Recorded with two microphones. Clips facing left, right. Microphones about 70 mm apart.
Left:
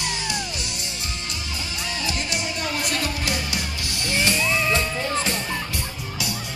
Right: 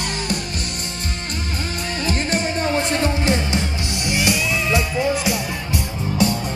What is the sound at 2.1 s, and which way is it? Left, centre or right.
Music, right.